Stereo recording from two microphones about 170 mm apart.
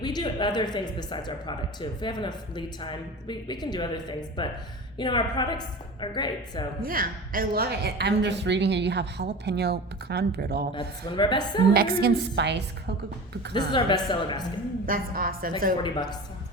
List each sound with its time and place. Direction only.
0.0 s speech: 25° left (ahead or behind)
6.8 s a woman's voice: 55° right (ahead or behind)
10.8 s speech: 30° left (ahead or behind)
11.7 s a woman's voice: 60° right (ahead or behind); by 12.6 s 90° right
13.7 s speech: 25° left (ahead or behind)
14.8 s a woman's voice: 60° right (ahead or behind)
15.8 s speech: 25° left (ahead or behind)